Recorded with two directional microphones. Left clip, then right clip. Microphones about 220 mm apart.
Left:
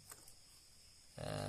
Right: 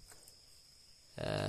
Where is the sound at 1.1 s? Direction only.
30° right (ahead or behind).